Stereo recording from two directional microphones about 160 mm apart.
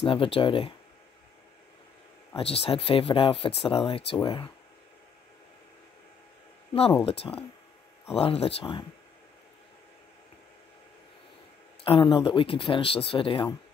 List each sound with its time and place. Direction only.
0.0 s speech: 35° left (ahead or behind)
2.3 s speech: 35° left (ahead or behind)
6.7 s speech: 35° left (ahead or behind)
11.8 s speech: 35° left (ahead or behind)